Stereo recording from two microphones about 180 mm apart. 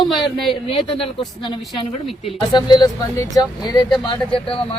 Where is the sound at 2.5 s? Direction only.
25° left (ahead or behind).